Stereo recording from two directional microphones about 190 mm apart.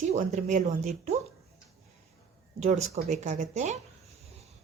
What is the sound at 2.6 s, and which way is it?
A woman's voice, 35° right (ahead or behind).